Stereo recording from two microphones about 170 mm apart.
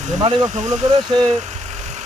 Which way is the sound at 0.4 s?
45° right (ahead or behind).